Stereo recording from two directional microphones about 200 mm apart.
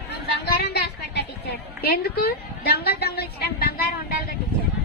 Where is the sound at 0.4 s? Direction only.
50° left (ahead or behind).